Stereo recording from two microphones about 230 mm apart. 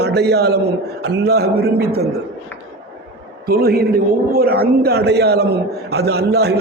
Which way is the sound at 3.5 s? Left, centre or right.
Right.